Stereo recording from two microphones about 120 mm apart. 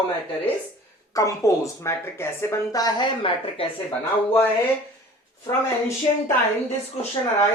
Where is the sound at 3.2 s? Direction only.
50° left (ahead or behind).